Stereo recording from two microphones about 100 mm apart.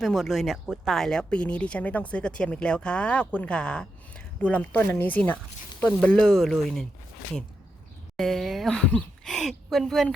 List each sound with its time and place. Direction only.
0.0 s speech: centre (ahead or behind)
8.1 s speech: 5° left (ahead or behind)